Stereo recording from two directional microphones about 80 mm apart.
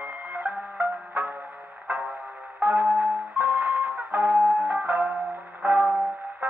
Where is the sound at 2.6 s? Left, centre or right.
Right.